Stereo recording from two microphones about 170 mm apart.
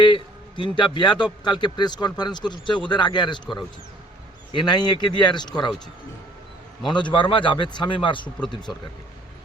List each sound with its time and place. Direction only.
0.0 s a man's voice: 30° left (ahead or behind)
6.8 s a man's voice: 25° left (ahead or behind)